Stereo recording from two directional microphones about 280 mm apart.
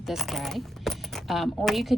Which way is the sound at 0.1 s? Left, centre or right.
Centre.